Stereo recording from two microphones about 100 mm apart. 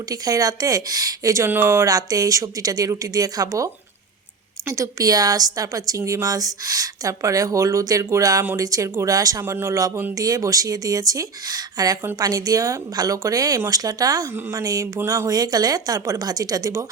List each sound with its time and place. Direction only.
0.1 s speech: 35° right (ahead or behind)
1.5 s speech: 20° right (ahead or behind)